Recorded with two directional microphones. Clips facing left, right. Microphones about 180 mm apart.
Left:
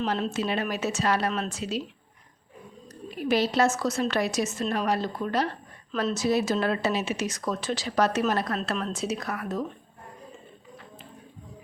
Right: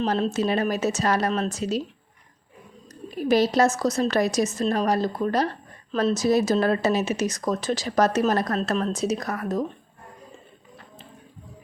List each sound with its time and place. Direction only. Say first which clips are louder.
0.0 s speech: right 4 dB; 40° right (ahead or behind)
3.2 s speech: right 4 dB; 40° right (ahead or behind)